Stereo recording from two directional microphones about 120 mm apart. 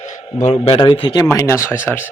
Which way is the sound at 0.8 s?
45° left (ahead or behind).